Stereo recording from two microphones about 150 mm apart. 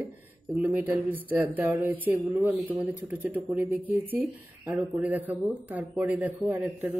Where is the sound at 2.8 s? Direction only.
10° right (ahead or behind).